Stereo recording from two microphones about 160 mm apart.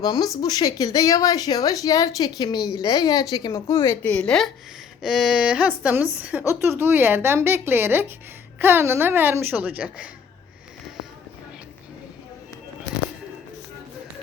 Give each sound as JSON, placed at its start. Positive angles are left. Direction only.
{"t": 0.0, "sound": "a woman's voice", "side_deg": 25}